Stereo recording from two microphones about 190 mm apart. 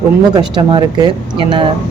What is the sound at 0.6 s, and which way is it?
Speech, 25° right (ahead or behind).